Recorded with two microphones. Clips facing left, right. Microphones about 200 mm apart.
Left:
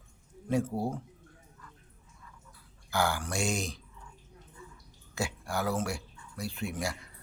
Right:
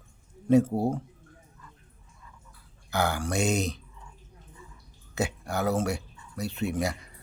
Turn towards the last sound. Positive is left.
turn(degrees=-20)  # may be behind; listen again after turning